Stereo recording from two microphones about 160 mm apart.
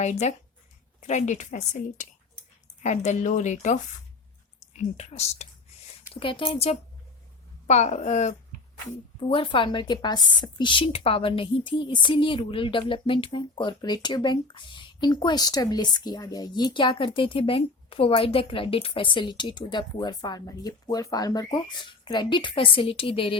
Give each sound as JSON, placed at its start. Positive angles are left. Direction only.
{"t": 0.0, "sound": "a woman's voice", "side_deg": 45}
{"t": 6.1, "sound": "a woman's voice", "side_deg": 30}
{"t": 9.3, "sound": "a woman's voice", "side_deg": 30}